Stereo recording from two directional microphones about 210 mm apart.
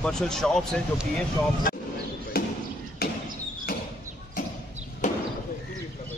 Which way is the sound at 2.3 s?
45° left (ahead or behind).